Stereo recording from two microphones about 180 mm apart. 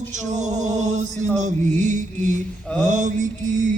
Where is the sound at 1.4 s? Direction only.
40° right (ahead or behind).